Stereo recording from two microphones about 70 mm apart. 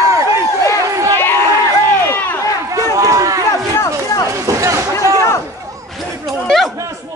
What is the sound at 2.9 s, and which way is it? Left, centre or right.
Run, right.